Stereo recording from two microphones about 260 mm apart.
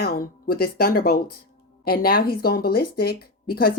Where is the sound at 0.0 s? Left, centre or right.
Left.